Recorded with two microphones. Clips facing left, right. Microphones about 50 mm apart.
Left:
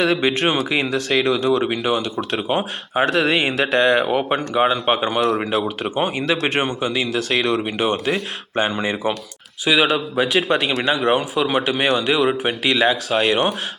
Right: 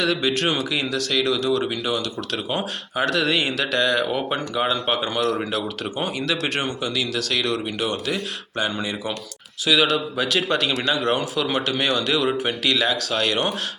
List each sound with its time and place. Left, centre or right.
0.0 s speech: left